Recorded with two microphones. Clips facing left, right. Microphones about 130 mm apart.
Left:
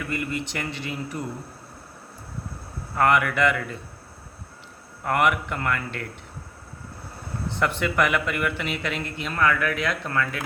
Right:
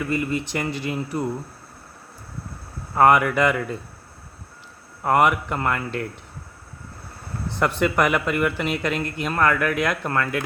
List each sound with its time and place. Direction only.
0.1 s speech: 40° right (ahead or behind)
2.9 s speech: 40° right (ahead or behind)
5.0 s speech: 40° right (ahead or behind)
7.6 s speech: 40° right (ahead or behind)